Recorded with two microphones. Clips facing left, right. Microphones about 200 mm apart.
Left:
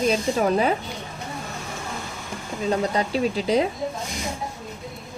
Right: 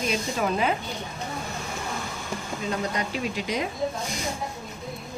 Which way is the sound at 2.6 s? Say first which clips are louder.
Left 6 dB; 30° left (ahead or behind).